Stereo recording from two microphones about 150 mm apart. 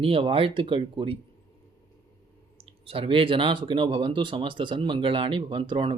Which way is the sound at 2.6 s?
40° right (ahead or behind).